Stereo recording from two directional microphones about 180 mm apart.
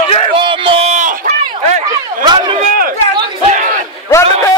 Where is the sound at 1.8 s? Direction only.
20° right (ahead or behind).